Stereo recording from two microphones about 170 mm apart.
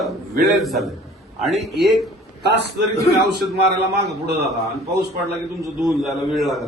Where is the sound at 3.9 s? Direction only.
75° right (ahead or behind).